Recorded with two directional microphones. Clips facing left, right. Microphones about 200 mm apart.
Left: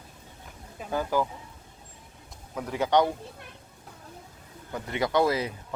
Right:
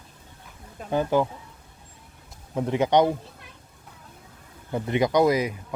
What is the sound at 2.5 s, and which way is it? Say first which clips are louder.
Speech: right 4 dB; 25° right (ahead or behind).